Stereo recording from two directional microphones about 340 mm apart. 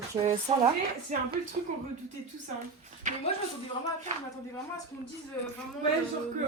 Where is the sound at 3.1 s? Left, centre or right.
Right.